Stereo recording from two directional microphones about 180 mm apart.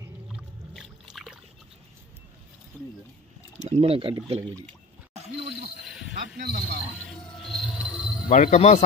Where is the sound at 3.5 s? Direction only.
35° right (ahead or behind).